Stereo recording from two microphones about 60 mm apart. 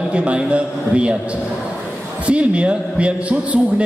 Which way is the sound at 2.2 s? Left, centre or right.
Right.